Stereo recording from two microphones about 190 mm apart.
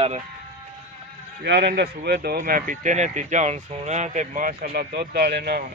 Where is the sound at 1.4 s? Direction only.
60° right (ahead or behind).